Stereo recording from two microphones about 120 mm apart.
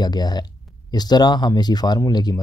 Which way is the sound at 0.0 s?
35° left (ahead or behind).